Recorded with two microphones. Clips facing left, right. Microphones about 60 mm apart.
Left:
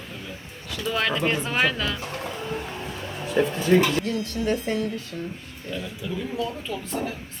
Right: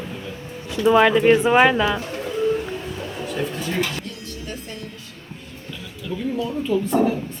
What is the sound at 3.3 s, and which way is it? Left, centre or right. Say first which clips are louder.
Speech: left 6 dB; left.